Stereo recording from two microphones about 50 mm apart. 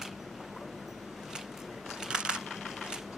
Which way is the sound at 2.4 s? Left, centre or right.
Centre.